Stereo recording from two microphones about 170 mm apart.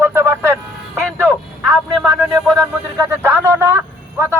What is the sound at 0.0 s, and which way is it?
Music, 15° right (ahead or behind).